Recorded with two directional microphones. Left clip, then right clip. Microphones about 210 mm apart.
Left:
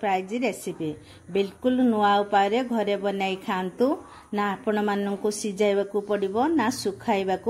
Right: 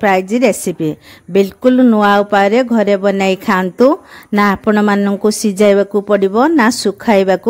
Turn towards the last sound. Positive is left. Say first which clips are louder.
# right 14 dB
turn(degrees=-50)  # may be behind; listen again after turning